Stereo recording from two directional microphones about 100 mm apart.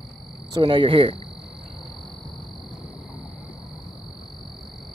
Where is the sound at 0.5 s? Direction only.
55° right (ahead or behind).